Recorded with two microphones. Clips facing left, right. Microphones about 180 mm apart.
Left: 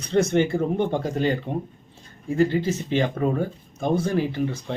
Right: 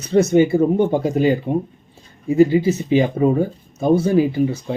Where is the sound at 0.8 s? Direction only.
45° right (ahead or behind).